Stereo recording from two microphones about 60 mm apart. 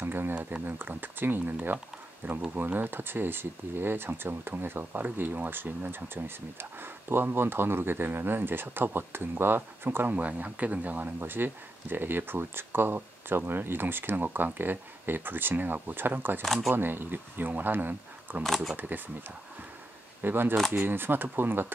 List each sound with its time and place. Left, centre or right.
0.0 s speech: right
0.3 s speech: right
0.7 s speech: right
16.4 s speech: centre
16.7 s speech: right
18.4 s speech: centre
18.8 s speech: right